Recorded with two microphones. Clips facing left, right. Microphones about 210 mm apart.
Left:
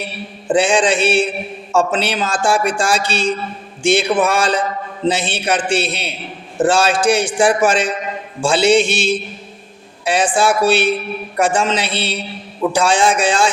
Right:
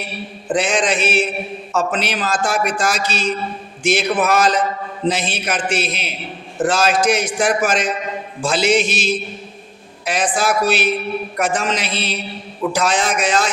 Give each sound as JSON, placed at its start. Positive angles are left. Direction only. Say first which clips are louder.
{"t": 0.5, "sound": "a man's voice", "louder": "left 4 dB", "side_deg": 30}